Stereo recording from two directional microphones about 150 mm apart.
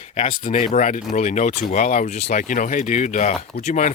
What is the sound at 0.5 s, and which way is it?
Speech, 55° left (ahead or behind).